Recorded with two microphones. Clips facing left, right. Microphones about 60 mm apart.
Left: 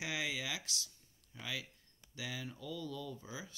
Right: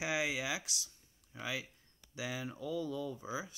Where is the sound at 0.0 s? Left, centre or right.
Centre.